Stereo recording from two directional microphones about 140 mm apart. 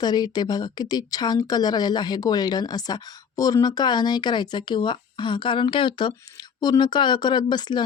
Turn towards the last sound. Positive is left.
turn(degrees=30)  # may be behind; listen again after turning